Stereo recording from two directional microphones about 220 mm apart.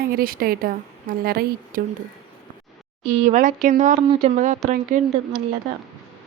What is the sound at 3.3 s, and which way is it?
Speech, 35° right (ahead or behind).